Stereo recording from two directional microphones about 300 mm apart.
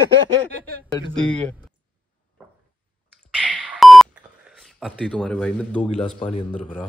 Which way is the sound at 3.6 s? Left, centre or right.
Centre.